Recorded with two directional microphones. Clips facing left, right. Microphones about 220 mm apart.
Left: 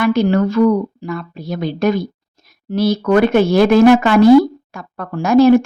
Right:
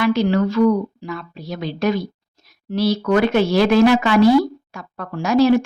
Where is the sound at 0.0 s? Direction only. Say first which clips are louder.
Left 3 dB; 50° left (ahead or behind).